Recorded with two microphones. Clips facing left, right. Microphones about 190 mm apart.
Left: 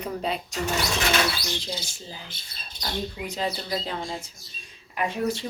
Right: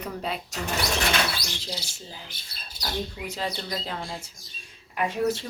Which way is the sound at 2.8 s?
5° right (ahead or behind).